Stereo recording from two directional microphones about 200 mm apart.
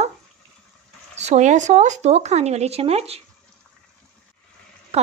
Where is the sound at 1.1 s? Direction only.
35° right (ahead or behind).